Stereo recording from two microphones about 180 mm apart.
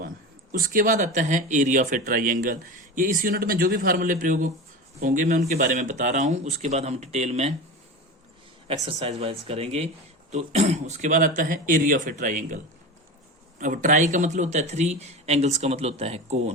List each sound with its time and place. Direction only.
0.6 s a man's voice: 50° right (ahead or behind)
8.6 s a man's voice: 35° right (ahead or behind)
13.6 s a man's voice: 45° right (ahead or behind)